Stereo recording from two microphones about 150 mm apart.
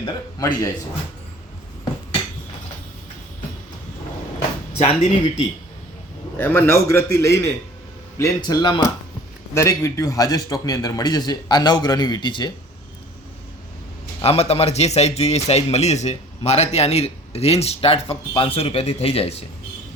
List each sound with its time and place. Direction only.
0.3 s a man's voice: 25° left (ahead or behind)
4.8 s speech: 40° left (ahead or behind)
6.3 s a man's voice: 15° left (ahead or behind); by 12.5 s 30° left (ahead or behind)
14.2 s speech: 45° left (ahead or behind)